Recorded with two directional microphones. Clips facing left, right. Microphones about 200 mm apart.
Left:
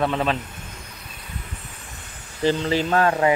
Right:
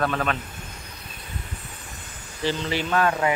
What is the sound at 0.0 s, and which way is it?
Speech, 25° left (ahead or behind).